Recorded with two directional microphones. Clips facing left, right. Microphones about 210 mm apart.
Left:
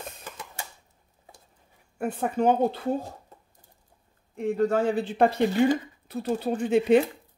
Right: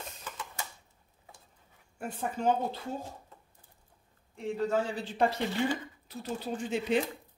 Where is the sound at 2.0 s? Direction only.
60° left (ahead or behind).